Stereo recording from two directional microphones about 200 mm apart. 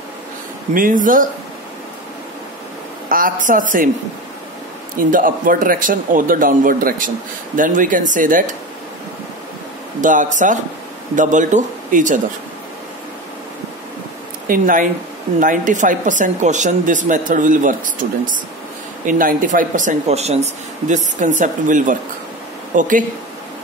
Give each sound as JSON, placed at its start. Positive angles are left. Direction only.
{"t": 0.7, "sound": "a woman's voice", "side_deg": -40}
{"t": 3.1, "sound": "a woman's voice", "side_deg": -45}
{"t": 5.1, "sound": "a man's voice", "side_deg": -45}
{"t": 10.0, "sound": "a woman's voice", "side_deg": -40}
{"t": 14.5, "sound": "a man's voice", "side_deg": -40}